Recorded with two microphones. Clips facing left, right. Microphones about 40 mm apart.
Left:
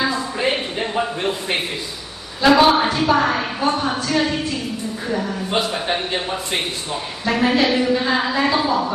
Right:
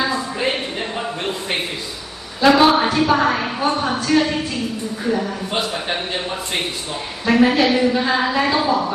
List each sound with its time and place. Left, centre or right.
0.0 s a sound: centre
2.4 s a woman's voice: centre
5.1 s a woman's voice: centre